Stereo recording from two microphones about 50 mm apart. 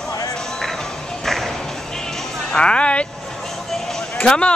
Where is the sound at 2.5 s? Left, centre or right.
Left.